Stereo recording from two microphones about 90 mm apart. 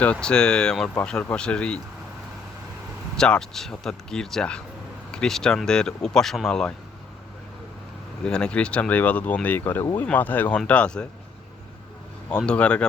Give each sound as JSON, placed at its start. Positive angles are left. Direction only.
{"t": 0.0, "sound": "speech", "side_deg": 15}
{"t": 3.2, "sound": "speech", "side_deg": 10}
{"t": 8.2, "sound": "speech", "side_deg": 10}
{"t": 12.5, "sound": "speech", "side_deg": 15}